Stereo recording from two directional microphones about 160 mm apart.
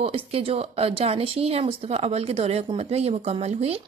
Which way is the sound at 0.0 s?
35° right (ahead or behind).